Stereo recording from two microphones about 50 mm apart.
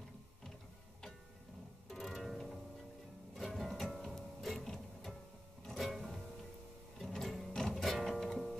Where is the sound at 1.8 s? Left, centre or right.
Centre.